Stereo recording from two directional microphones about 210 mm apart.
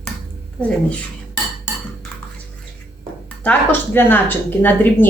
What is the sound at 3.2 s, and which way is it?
A woman's voice, 5° left (ahead or behind).